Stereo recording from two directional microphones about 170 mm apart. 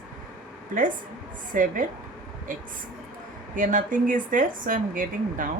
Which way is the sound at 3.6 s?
50° right (ahead or behind).